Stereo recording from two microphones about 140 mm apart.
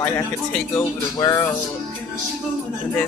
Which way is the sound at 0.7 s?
25° left (ahead or behind).